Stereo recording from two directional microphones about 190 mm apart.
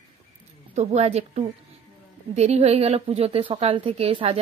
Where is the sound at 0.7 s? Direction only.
35° right (ahead or behind).